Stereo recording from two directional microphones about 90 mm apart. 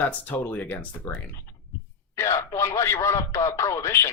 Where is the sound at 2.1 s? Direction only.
35° left (ahead or behind).